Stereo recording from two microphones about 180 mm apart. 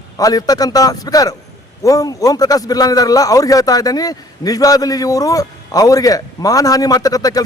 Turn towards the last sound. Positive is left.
turn(degrees=20)  # may be behind; listen again after turning